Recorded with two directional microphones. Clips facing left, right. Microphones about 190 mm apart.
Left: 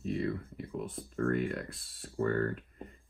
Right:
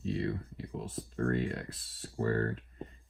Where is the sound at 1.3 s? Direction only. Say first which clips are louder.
Left 1 dB; 30° right (ahead or behind).